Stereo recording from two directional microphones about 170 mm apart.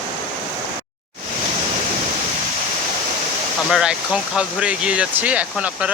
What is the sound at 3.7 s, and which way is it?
Speech, 5° right (ahead or behind).